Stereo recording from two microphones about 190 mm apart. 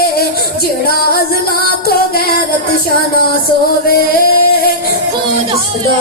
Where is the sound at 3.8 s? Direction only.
50° left (ahead or behind).